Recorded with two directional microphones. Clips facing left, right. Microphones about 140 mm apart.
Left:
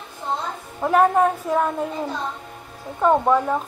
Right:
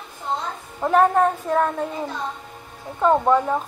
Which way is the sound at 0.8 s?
5° left (ahead or behind).